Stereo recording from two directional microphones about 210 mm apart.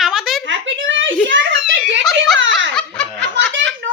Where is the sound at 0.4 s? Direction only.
60° right (ahead or behind).